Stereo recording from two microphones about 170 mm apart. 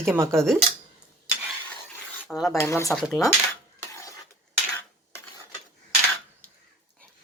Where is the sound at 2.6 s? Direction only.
15° left (ahead or behind).